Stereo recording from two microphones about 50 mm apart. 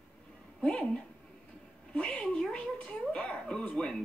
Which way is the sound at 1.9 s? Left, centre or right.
Centre.